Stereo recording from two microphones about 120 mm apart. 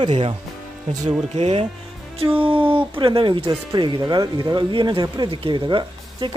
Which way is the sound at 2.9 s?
45° right (ahead or behind).